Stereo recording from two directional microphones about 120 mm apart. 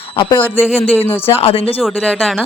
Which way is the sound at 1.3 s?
50° left (ahead or behind).